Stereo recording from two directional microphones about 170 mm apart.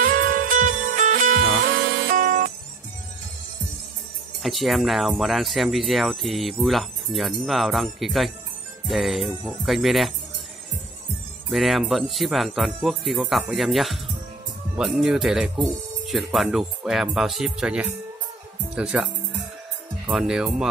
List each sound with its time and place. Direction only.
0.0 s music: 50° right (ahead or behind)
4.4 s speech: centre (ahead or behind)
11.5 s speech: centre (ahead or behind)
20.1 s speech: 5° right (ahead or behind)